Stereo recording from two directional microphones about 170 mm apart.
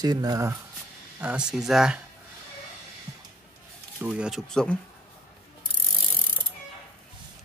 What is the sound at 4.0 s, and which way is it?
Speech, 10° right (ahead or behind).